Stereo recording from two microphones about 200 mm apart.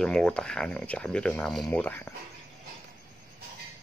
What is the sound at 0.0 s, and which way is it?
Speech, 5° left (ahead or behind).